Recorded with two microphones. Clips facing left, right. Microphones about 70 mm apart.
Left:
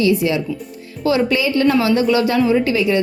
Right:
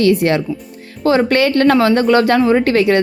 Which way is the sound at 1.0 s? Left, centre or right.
Right.